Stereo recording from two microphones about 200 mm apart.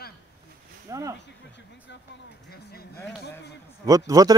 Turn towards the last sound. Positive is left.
turn(degrees=-15)  # may be behind; listen again after turning